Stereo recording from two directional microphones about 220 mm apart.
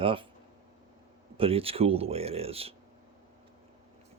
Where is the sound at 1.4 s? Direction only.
25° right (ahead or behind).